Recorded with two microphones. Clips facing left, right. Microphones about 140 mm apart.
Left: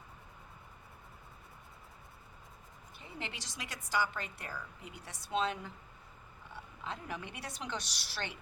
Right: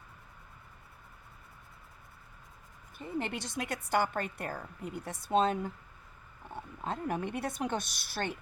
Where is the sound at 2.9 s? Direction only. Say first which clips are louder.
Right 10 dB; 50° right (ahead or behind).